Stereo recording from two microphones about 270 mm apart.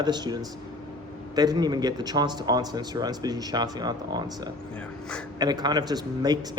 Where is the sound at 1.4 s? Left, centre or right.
Centre.